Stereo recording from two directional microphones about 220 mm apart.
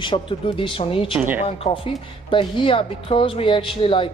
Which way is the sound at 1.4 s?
25° left (ahead or behind).